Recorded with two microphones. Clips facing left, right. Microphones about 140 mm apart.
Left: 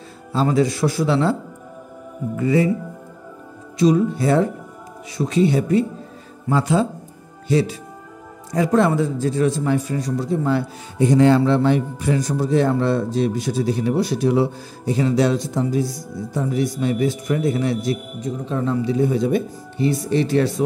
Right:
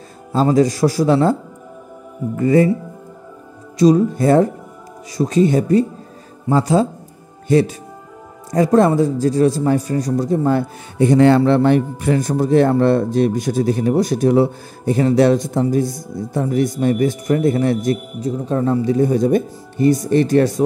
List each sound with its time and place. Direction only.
0.3 s speech: 40° right (ahead or behind)
2.3 s a man's voice: 45° right (ahead or behind)
3.7 s a man's voice: 40° right (ahead or behind)
7.4 s a man's voice: 50° right (ahead or behind)